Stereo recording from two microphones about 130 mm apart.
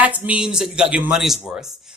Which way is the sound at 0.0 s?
10° right (ahead or behind).